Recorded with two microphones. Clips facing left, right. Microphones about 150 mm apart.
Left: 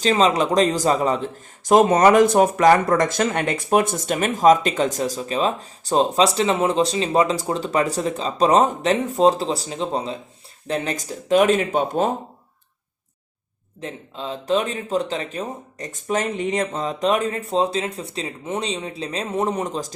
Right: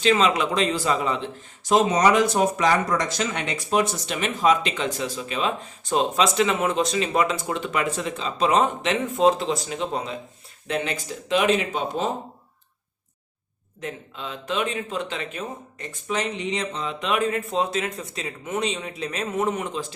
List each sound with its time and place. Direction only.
0.0 s speech: 35° left (ahead or behind)
10.7 s speech: 40° left (ahead or behind)
13.8 s speech: 35° left (ahead or behind)